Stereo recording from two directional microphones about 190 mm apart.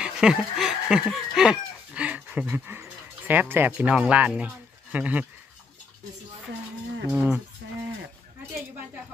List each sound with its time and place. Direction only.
0.0 s chicken: 5° right (ahead or behind)
7.1 s speech: 10° right (ahead or behind)
7.6 s a sound: 65° right (ahead or behind)